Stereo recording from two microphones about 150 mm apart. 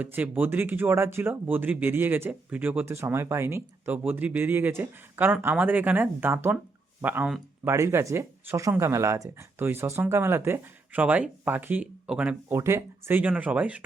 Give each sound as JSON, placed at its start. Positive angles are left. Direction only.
{"t": 0.0, "sound": "speech", "side_deg": -10}